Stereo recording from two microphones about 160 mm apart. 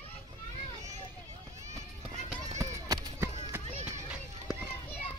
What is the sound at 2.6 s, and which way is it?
Run, 20° right (ahead or behind).